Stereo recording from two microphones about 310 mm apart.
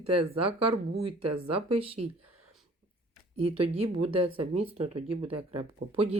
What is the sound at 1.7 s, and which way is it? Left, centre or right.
Speech, centre.